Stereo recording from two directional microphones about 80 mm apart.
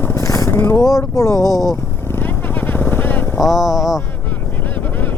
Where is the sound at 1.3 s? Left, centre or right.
Right.